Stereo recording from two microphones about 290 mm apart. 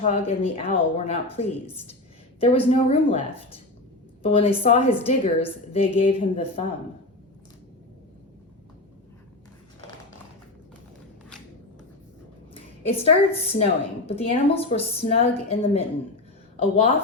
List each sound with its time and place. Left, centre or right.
0.0 s a woman's voice: left
4.2 s a woman's voice: centre
12.5 s a woman's voice: centre